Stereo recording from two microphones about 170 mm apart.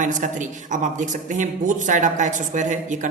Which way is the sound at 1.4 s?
50° right (ahead or behind).